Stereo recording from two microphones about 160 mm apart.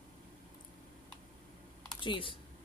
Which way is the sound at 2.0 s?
30° left (ahead or behind).